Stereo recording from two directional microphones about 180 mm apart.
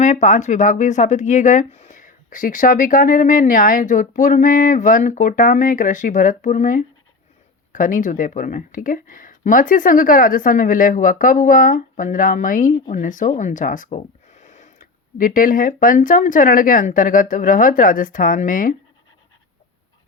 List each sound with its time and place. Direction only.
0.0 s speech: 40° left (ahead or behind)